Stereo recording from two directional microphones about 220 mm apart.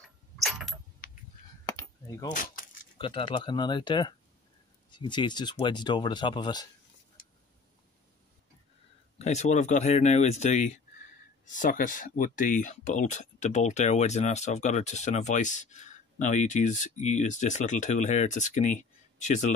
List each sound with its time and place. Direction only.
0.4 s a sound: centre (ahead or behind)
1.0 s honk: 40° left (ahead or behind)
1.7 s a sound: 15° left (ahead or behind)
2.3 s keys jangling: 40° left (ahead or behind)
3.0 s speech: 20° left (ahead or behind)
9.2 s speech: 30° left (ahead or behind)